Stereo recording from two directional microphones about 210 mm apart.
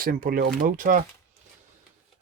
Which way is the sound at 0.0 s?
45° right (ahead or behind).